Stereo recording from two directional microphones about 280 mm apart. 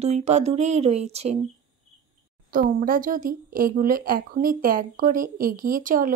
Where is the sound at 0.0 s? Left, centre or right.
Right.